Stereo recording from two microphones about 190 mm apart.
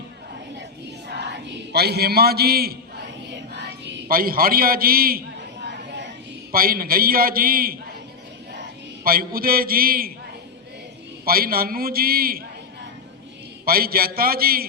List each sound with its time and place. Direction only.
1.0 s chant: 65° right (ahead or behind)
3.2 s a sound: 65° right (ahead or behind); by 5.2 s 50° right (ahead or behind)
6.5 s a man's voice: 50° right (ahead or behind)
9.0 s a man's voice: 50° right (ahead or behind)
11.3 s a man's voice: 50° right (ahead or behind)
13.7 s a man's voice: 50° right (ahead or behind)